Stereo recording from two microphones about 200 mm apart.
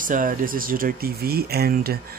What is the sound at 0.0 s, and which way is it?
Speech, 45° right (ahead or behind).